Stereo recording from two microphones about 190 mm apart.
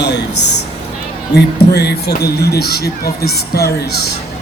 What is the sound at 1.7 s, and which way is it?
Speech, 60° left (ahead or behind).